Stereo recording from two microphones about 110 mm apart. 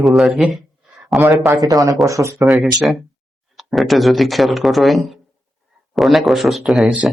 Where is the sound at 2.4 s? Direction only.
Centre (ahead or behind).